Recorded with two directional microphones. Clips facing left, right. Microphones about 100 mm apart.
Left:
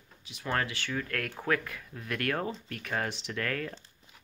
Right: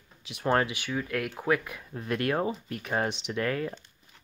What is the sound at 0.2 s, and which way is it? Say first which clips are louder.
Speech: right 8 dB; 90° right.